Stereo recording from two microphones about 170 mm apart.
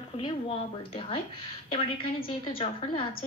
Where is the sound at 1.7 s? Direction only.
30° left (ahead or behind).